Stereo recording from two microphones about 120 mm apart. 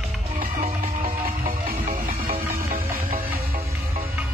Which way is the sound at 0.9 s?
90° right.